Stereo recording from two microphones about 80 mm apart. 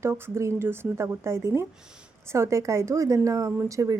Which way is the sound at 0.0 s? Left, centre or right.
Right.